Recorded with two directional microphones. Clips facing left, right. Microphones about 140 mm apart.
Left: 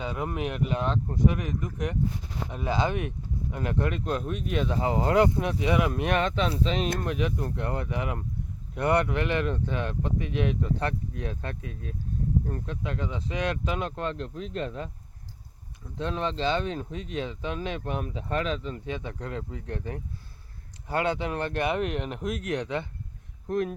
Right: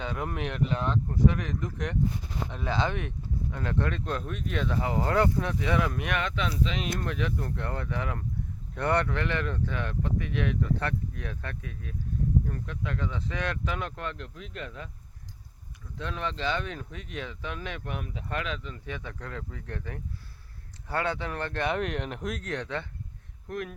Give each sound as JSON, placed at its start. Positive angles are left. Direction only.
{"t": 0.0, "sound": "speech", "side_deg": 10}
{"t": 1.4, "sound": "speech", "side_deg": 10}
{"t": 6.0, "sound": "speech", "side_deg": 35}
{"t": 7.0, "sound": "speech", "side_deg": 20}
{"t": 16.0, "sound": "speech", "side_deg": 30}
{"t": 21.7, "sound": "speech", "side_deg": 5}
{"t": 23.5, "sound": "speech", "side_deg": 30}